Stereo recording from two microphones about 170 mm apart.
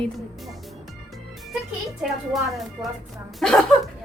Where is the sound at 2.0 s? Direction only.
Centre (ahead or behind).